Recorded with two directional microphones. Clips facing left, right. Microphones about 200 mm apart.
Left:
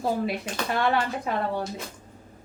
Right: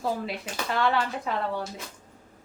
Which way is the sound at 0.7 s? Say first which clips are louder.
Left 1 dB; 15° left (ahead or behind).